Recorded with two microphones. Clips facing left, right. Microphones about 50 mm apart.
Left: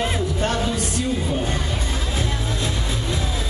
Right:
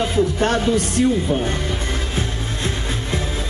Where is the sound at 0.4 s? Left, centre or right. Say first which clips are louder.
Right 5 dB; right.